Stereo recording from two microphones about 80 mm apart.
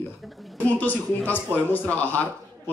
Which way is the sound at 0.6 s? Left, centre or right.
Left.